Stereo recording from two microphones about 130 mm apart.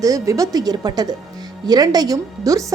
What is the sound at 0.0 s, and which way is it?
Speech, 25° right (ahead or behind).